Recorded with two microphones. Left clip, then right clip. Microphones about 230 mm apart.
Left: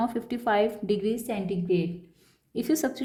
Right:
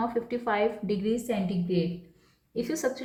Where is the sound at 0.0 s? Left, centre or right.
Left.